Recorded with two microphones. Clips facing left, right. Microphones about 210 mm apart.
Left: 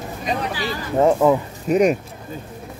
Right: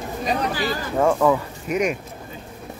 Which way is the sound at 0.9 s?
20° left (ahead or behind).